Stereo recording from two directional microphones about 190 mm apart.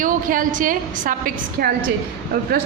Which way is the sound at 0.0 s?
45° right (ahead or behind).